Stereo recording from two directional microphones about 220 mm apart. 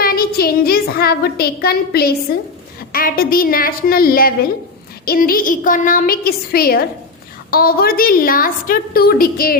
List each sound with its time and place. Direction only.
0.0 s a woman's voice: 45° left (ahead or behind)